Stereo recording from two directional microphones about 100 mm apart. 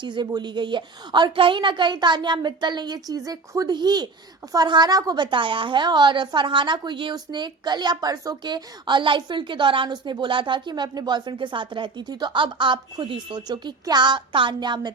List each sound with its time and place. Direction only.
0.0 s a woman's voice: 50° right (ahead or behind)